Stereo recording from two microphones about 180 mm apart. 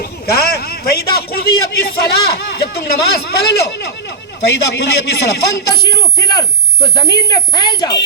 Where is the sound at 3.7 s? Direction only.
75° left (ahead or behind).